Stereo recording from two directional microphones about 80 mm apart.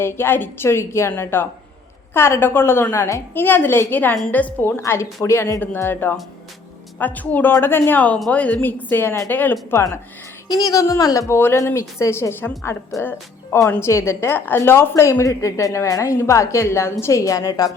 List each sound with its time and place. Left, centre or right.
0.0 s a woman's voice: left
4.8 s a woman's voice: left
10.5 s a woman's voice: left